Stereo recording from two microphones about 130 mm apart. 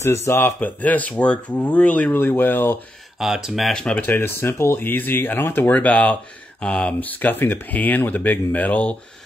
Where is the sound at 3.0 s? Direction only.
Centre (ahead or behind).